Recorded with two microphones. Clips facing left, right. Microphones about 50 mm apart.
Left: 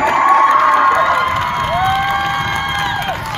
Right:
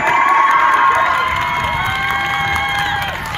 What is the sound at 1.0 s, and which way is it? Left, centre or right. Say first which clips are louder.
Cheering: left 1 dB; centre.